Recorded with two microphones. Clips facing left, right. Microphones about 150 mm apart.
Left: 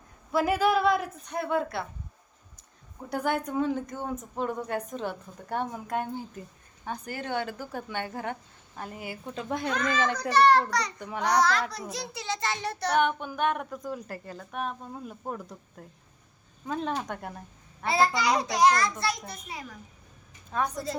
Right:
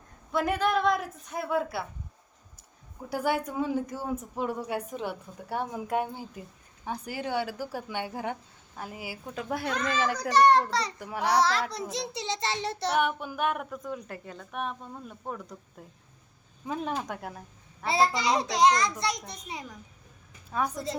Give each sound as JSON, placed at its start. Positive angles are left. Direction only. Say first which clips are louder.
{"t": 0.3, "sound": "a woman's voice", "louder": "left 3 dB", "side_deg": 5}
{"t": 3.1, "sound": "a woman's voice", "louder": "even", "side_deg": -5}
{"t": 10.3, "sound": "a child's voice", "louder": "even", "side_deg": -20}
{"t": 11.0, "sound": "a woman's voice", "louder": "even", "side_deg": -5}
{"t": 11.7, "sound": "a child's voice", "louder": "right 3 dB", "side_deg": -25}
{"t": 12.9, "sound": "a woman's voice", "louder": "left 3 dB", "side_deg": -5}
{"t": 17.8, "sound": "a child's voice", "louder": "left 1 dB", "side_deg": -25}
{"t": 20.5, "sound": "a woman's voice", "louder": "even", "side_deg": -5}